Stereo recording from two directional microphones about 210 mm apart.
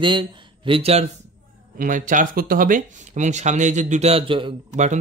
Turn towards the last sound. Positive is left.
turn(degrees=-30)  # may be behind; listen again after turning